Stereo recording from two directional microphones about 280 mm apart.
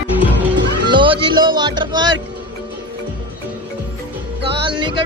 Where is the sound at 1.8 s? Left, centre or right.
Centre.